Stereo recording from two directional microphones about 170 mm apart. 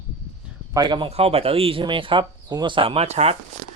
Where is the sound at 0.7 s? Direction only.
25° right (ahead or behind).